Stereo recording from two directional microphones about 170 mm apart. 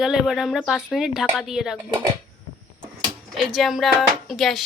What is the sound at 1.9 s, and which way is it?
Speech, 30° right (ahead or behind).